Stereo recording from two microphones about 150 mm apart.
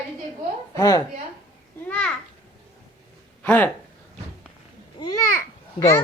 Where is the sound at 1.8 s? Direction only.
10° left (ahead or behind).